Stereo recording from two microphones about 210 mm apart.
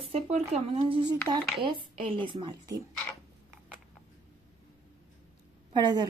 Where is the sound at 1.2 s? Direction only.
5° left (ahead or behind).